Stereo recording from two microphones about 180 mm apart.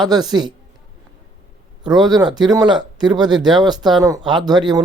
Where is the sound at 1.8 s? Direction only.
25° right (ahead or behind).